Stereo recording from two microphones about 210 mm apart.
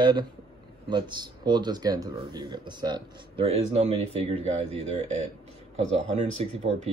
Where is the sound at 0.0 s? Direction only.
20° right (ahead or behind).